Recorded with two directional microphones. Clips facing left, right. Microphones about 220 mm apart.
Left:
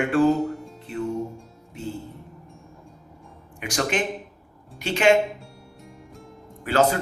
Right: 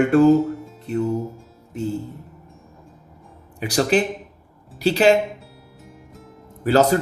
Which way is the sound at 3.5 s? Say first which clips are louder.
Right 6 dB; 35° right (ahead or behind).